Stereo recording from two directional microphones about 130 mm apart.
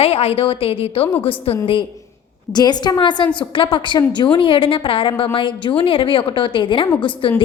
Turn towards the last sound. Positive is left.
turn(degrees=40)  # may be behind; listen again after turning